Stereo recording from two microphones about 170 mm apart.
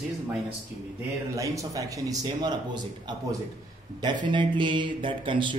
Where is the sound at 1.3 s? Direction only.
20° right (ahead or behind).